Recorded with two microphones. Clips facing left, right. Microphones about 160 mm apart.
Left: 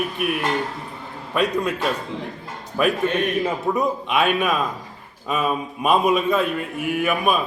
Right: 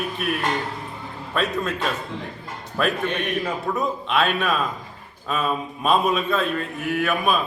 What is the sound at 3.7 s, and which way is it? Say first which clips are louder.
A man's voice: left 1 dB; 15° left (ahead or behind).